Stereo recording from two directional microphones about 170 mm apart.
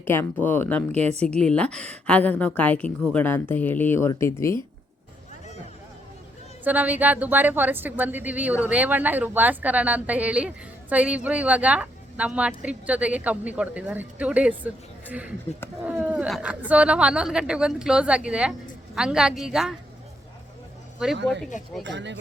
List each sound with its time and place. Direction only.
0.0 s a woman's voice: 15° left (ahead or behind)
0.9 s a woman's voice: 40° right (ahead or behind)
1.2 s a woman's voice: 5° left (ahead or behind)
6.7 s a woman's voice: 10° right (ahead or behind)
15.9 s a woman's voice: 10° right (ahead or behind)
21.8 s speech: 90° right